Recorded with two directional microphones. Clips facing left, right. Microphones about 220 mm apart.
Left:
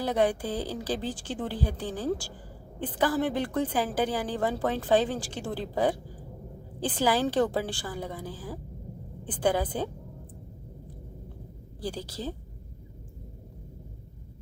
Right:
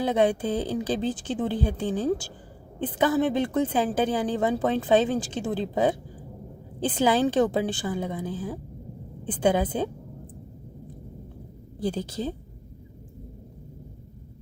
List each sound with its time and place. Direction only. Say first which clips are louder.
0.0 s a woman's voice: right 3 dB; 25° right (ahead or behind)
11.8 s a woman's voice: right 6 dB; 20° right (ahead or behind)